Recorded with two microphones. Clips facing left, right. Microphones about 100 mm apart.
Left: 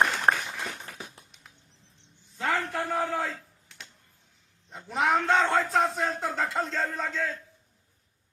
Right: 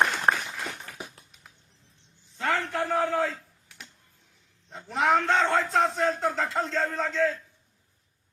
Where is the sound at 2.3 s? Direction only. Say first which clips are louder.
Right 1 dB; centre (ahead or behind).